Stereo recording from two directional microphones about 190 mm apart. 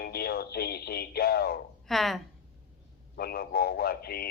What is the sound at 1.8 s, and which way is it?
Speech, centre (ahead or behind).